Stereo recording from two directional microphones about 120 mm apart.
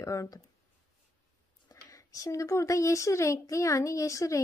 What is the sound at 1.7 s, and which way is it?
Speech, 30° left (ahead or behind).